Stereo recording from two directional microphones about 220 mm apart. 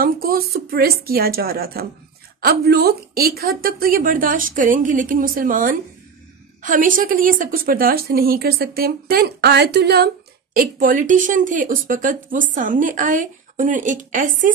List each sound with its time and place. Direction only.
0.0 s a woman's voice: 40° right (ahead or behind)